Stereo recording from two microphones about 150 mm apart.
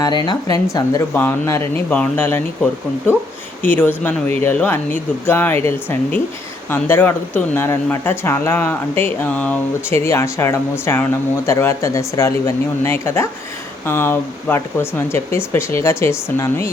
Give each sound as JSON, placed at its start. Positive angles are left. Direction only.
{"t": 0.3, "sound": "speech", "side_deg": 25}
{"t": 3.6, "sound": "speech", "side_deg": 10}